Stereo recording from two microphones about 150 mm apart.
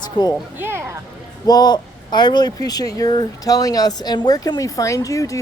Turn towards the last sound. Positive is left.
turn(degrees=20)  # may be behind; listen again after turning